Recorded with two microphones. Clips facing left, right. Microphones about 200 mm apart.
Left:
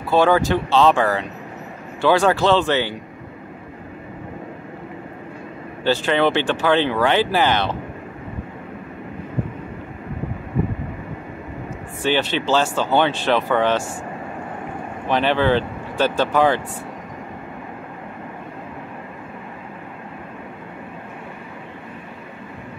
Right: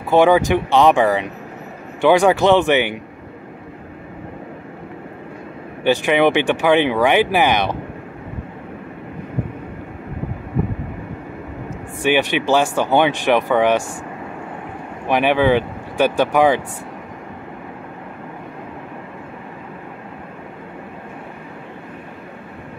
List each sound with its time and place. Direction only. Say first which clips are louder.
0.1 s speech: right 3 dB; 15° right (ahead or behind)
5.9 s speech: right 3 dB; 15° right (ahead or behind)
12.0 s speech: right 3 dB; 15° right (ahead or behind)
15.0 s speech: right 3 dB; 15° right (ahead or behind)